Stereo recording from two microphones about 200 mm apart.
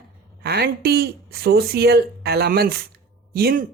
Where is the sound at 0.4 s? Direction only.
55° right (ahead or behind).